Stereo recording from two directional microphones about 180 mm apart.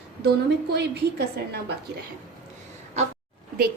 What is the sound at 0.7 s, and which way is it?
Speech, 65° right (ahead or behind).